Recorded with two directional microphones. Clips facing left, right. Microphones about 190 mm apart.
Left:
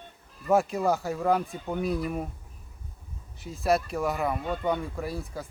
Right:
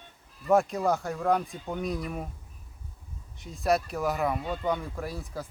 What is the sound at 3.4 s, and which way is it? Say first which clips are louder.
Speech: left 1 dB; centre (ahead or behind).